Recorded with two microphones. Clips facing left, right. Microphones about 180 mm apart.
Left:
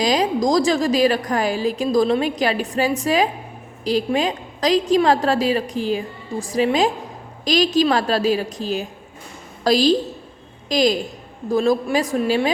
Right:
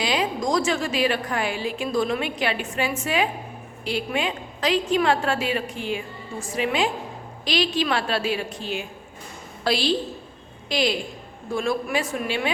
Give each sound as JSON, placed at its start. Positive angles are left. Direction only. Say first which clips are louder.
{"t": 0.0, "sound": "a woman's voice", "louder": "left 6 dB", "side_deg": 40}